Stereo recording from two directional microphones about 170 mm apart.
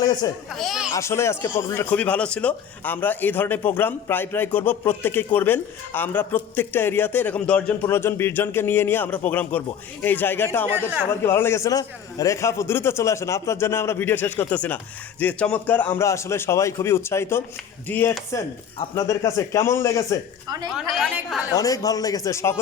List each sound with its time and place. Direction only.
0.5 s speech: centre (ahead or behind)
0.9 s speech: 15° left (ahead or behind)
21.5 s speech: 20° left (ahead or behind)